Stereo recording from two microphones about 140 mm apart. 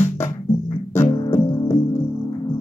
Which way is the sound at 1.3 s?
20° left (ahead or behind).